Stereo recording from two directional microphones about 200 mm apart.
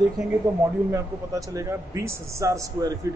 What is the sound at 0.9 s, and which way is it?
A man's voice, 15° right (ahead or behind).